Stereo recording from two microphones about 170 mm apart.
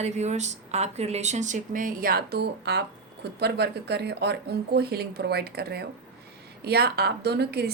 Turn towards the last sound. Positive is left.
turn(degrees=-70)  # may be behind; listen again after turning